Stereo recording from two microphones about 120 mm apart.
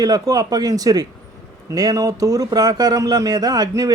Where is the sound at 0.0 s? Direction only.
30° right (ahead or behind).